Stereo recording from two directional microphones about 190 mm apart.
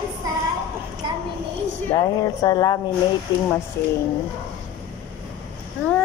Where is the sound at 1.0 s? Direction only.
25° right (ahead or behind).